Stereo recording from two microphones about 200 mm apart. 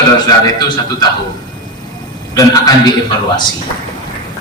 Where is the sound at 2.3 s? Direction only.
20° left (ahead or behind).